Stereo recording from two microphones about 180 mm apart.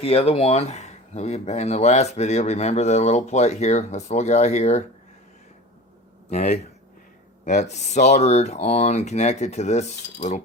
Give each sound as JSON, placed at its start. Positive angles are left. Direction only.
{"t": 0.0, "sound": "speech", "side_deg": 30}
{"t": 6.3, "sound": "speech", "side_deg": 40}